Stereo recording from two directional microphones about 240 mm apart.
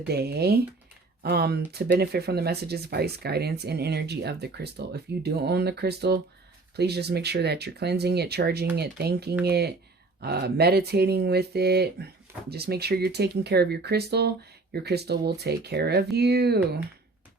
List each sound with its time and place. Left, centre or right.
0.1 s speech: right